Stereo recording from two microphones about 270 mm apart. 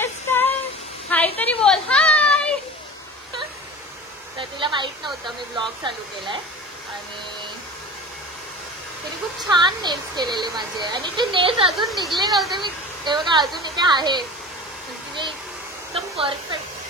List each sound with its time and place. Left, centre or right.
0.0 s a sound: centre
4.4 s a sound: centre
9.5 s speech: centre
11.9 s speech: centre
12.5 s speech: centre
15.9 s hair dryer: centre